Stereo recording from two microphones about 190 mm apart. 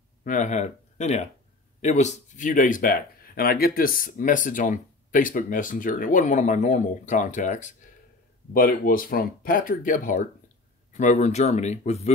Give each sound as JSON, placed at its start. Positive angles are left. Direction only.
{"t": 0.2, "sound": "speech", "side_deg": 40}